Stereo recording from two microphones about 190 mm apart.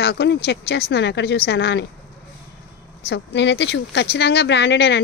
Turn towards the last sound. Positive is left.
turn(degrees=65)  # may be behind; listen again after turning